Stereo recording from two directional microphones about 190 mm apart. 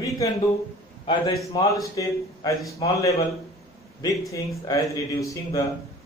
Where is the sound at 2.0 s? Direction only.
20° left (ahead or behind).